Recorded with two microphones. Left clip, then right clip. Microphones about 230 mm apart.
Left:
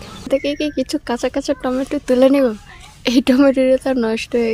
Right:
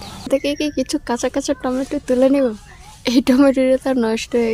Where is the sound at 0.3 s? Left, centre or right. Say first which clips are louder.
Even; centre.